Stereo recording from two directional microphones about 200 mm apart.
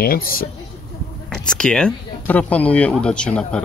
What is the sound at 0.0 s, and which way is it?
Speech, 45° left (ahead or behind).